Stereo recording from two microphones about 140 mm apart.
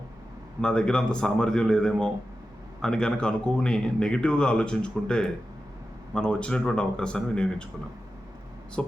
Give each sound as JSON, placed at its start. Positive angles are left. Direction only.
{"t": 0.6, "sound": "a man's voice", "side_deg": 5}